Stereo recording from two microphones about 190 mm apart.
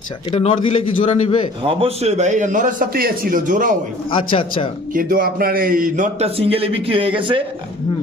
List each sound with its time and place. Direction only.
0.3 s a man's voice: 30° left (ahead or behind)
1.6 s a man's voice: 30° right (ahead or behind)
4.1 s a man's voice: 25° left (ahead or behind)
4.9 s a man's voice: 50° right (ahead or behind); by 7.4 s 25° right (ahead or behind)